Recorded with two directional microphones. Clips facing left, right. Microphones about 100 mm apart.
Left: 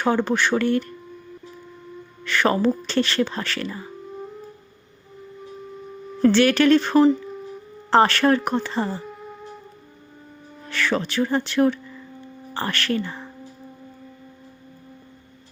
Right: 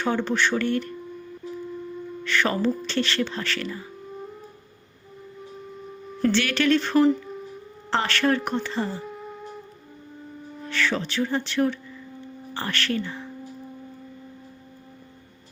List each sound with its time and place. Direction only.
0.0 s speech: 45° left (ahead or behind)
2.2 s speech: 40° left (ahead or behind)
6.2 s speech: 40° left (ahead or behind)
9.0 s music: centre (ahead or behind)
10.7 s speech: 45° left (ahead or behind)